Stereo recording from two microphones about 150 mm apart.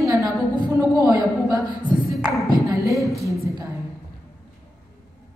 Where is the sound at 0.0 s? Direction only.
20° right (ahead or behind).